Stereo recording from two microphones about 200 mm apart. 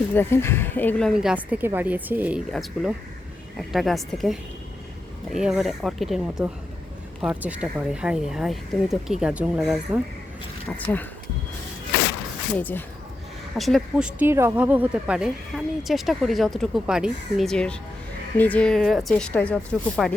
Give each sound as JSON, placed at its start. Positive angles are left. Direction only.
{"t": 0.1, "sound": "speech", "side_deg": 10}
{"t": 12.5, "sound": "speech", "side_deg": 10}